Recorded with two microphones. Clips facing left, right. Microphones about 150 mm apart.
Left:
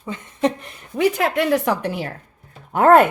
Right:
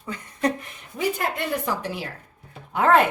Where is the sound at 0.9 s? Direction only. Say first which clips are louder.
Left 7 dB; 85° left; by 3.0 s 45° left (ahead or behind).